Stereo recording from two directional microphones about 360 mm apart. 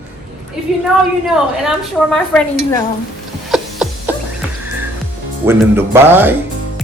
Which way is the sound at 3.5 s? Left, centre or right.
Centre.